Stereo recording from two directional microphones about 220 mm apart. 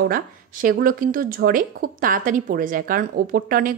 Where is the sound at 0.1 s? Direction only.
40° right (ahead or behind).